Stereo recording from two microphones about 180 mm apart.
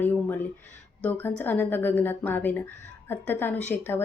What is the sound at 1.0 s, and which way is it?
Speech, 10° left (ahead or behind).